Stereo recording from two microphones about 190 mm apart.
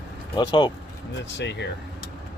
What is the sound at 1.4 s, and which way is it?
Speech, 65° left (ahead or behind).